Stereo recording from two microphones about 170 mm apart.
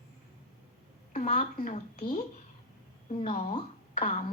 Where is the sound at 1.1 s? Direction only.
45° left (ahead or behind).